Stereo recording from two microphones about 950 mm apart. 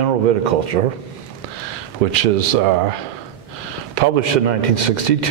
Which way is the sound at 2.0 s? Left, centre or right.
Right.